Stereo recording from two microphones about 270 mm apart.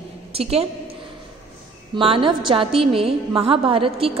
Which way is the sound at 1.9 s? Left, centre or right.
Centre.